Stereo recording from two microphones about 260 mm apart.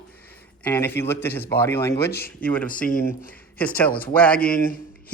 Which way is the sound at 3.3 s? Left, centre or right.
Centre.